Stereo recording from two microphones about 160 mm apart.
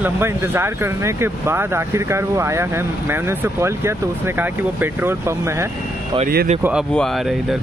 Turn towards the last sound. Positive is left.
turn(degrees=0)  # may be behind; listen again after turning